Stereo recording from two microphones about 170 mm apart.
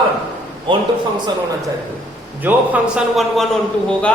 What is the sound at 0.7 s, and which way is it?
Speech, 30° right (ahead or behind).